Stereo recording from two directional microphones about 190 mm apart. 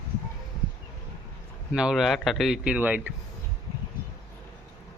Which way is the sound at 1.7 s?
5° right (ahead or behind).